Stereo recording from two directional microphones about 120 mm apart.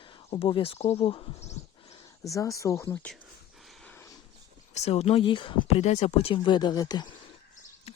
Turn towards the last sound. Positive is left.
turn(degrees=35)  # may be behind; listen again after turning